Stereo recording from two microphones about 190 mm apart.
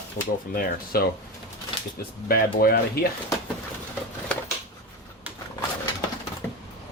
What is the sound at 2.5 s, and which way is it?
Speech, 50° left (ahead or behind).